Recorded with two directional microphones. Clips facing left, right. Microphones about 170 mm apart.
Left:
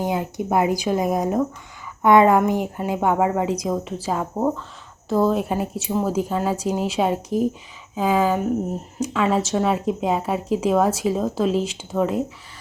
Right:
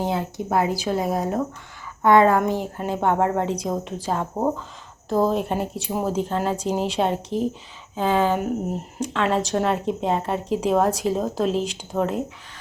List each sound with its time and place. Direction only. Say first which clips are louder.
0.1 s a woman's voice: left 2 dB; 15° left (ahead or behind)
4.4 s speech: left 1 dB; 10° right (ahead or behind)
5.2 s a woman's voice: left 1 dB; 5° left (ahead or behind)